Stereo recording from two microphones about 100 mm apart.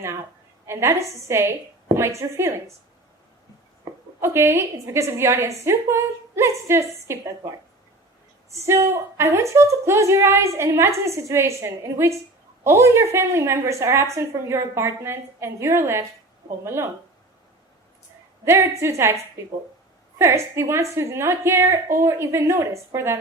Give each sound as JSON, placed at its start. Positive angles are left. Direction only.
{"t": 0.7, "sound": "a woman's voice", "side_deg": -30}
{"t": 3.9, "sound": "a sound", "side_deg": -35}
{"t": 4.2, "sound": "a woman's voice", "side_deg": -25}
{"t": 18.4, "sound": "a woman's voice", "side_deg": -30}